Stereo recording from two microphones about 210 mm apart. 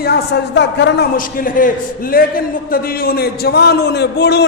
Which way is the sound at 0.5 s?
55° left (ahead or behind).